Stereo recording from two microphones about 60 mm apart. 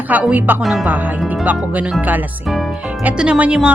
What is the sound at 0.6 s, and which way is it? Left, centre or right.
Music, centre.